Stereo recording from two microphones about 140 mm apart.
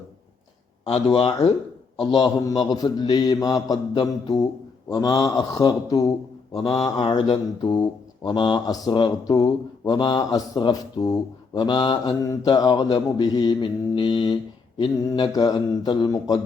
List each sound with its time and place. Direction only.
0.9 s a man's voice: 45° left (ahead or behind); by 6.1 s 25° left (ahead or behind)
6.7 s mantra: 30° left (ahead or behind)
14.8 s a man's voice: 35° left (ahead or behind)